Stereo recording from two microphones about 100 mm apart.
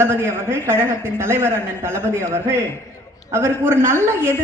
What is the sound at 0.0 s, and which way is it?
Speech, 25° right (ahead or behind).